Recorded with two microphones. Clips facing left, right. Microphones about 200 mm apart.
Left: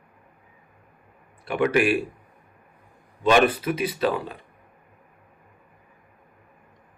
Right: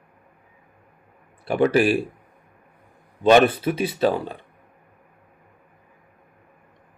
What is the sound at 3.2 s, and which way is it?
Speech, 30° right (ahead or behind).